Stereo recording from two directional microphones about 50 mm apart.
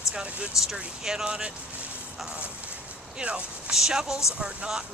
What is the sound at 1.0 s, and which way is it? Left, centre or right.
Speech, centre.